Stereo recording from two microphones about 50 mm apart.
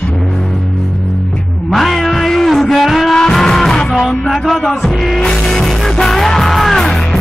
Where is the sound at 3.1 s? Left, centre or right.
Centre.